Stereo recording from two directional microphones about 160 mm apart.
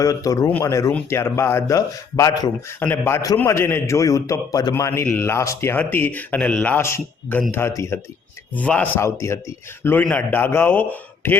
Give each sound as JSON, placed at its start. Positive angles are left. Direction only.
{"t": 0.0, "sound": "speech", "side_deg": 20}